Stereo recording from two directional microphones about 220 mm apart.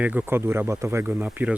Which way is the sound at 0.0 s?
5° right (ahead or behind).